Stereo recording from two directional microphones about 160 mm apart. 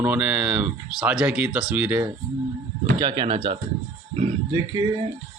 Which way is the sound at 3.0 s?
30° right (ahead or behind).